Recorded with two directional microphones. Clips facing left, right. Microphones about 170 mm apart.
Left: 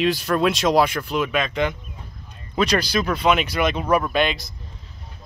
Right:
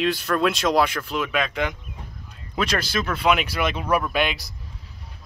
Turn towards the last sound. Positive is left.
turn(degrees=-10)  # may be behind; listen again after turning